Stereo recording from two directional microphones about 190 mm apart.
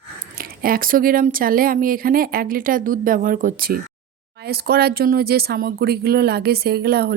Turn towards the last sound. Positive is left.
turn(degrees=-55)  # may be behind; listen again after turning